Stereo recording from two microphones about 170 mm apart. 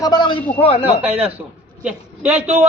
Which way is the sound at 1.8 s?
10° right (ahead or behind).